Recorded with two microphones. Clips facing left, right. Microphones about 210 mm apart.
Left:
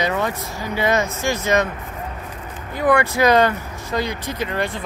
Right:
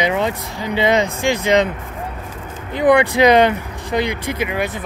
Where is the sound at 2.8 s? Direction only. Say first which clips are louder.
Right 4 dB; 20° right (ahead or behind).